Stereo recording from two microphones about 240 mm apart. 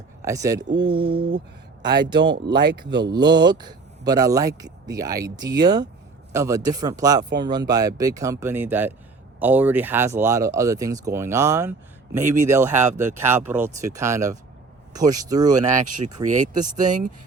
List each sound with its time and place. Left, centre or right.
0.2 s speech: centre
16.6 s speech: right